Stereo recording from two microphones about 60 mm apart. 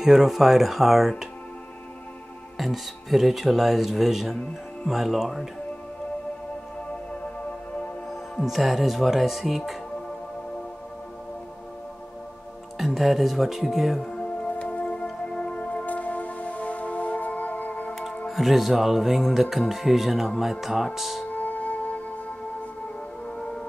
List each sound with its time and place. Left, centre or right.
0.0 s speech: centre
2.5 s speech: centre
8.5 s speech: centre
12.7 s speech: centre
14.1 s music: centre
18.2 s speech: centre
21.3 s music: left
23.2 s music: centre